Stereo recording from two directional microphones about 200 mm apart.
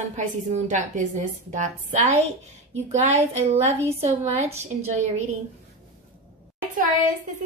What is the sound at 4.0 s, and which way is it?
Speech, 30° right (ahead or behind).